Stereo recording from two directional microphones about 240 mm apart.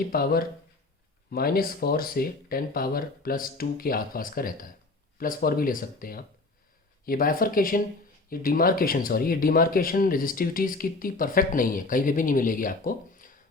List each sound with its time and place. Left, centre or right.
0.1 s speech: left